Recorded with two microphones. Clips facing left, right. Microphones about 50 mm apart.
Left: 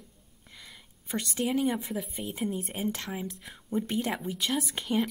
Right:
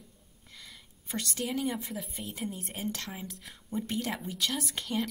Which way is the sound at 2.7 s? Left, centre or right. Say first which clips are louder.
Left 4 dB; centre.